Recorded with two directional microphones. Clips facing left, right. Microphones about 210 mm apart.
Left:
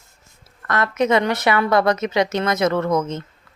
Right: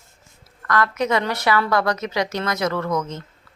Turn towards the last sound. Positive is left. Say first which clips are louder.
# left 4 dB
turn(degrees=20)  # may be behind; listen again after turning